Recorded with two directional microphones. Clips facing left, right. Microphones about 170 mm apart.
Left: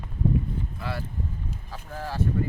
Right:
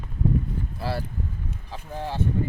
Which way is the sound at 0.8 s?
35° right (ahead or behind).